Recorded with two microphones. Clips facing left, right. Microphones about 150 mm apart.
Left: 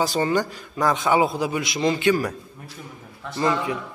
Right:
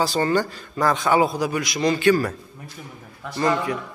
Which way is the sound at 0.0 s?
15° left (ahead or behind).